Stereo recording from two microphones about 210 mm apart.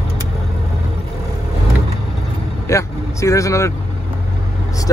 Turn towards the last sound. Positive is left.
turn(degrees=15)  # may be behind; listen again after turning